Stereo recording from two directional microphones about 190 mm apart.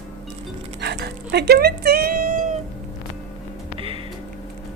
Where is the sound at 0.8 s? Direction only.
60° right (ahead or behind).